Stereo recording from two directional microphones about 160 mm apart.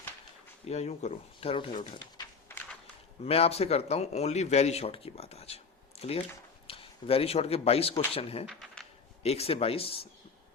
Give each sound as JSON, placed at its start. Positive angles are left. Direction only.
{"t": 0.6, "sound": "speech", "side_deg": 45}
{"t": 3.2, "sound": "speech", "side_deg": 40}
{"t": 8.4, "sound": "typing", "side_deg": 0}
{"t": 9.2, "sound": "speech", "side_deg": 40}